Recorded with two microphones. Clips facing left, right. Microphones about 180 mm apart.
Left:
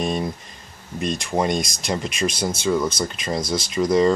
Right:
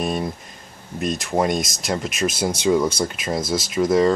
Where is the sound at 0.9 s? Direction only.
Centre (ahead or behind).